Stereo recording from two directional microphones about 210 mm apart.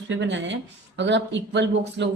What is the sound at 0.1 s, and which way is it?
Speech, 60° right (ahead or behind).